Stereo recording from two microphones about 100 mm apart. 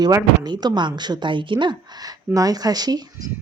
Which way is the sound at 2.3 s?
40° right (ahead or behind).